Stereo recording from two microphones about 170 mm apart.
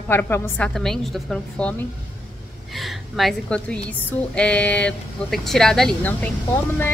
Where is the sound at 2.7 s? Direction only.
Centre (ahead or behind).